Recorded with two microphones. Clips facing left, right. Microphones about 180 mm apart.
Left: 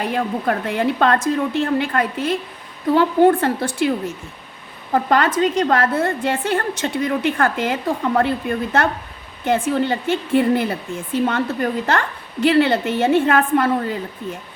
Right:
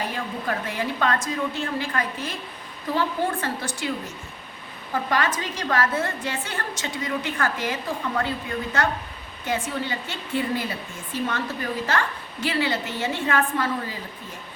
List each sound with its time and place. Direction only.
0.0 s a woman's voice: 60° left (ahead or behind)
5.0 s a woman's voice: 55° left (ahead or behind)